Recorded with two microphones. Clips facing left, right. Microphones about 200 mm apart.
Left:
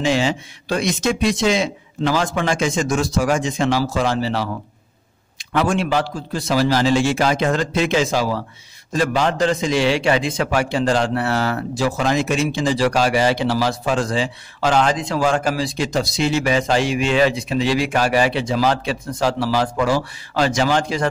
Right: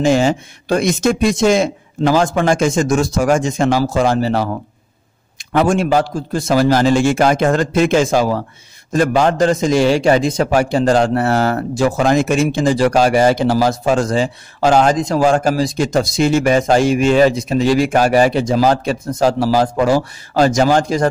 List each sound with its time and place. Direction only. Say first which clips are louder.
0.0 s a man's voice: right 5 dB; 45° right (ahead or behind)